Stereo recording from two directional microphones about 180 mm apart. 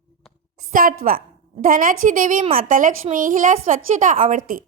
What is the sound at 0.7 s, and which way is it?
A woman's voice, 50° right (ahead or behind).